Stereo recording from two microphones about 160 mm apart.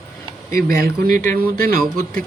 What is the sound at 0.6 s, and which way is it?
Speech, 65° right (ahead or behind).